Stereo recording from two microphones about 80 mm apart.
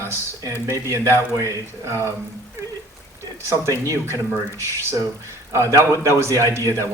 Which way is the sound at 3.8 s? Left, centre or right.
Right.